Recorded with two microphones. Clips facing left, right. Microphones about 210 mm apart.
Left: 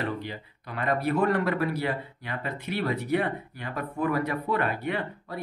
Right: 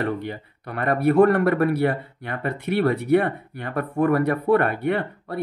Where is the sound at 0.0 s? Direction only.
55° right (ahead or behind).